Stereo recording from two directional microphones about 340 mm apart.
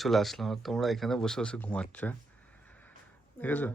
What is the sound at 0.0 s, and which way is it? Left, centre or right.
Speech, centre.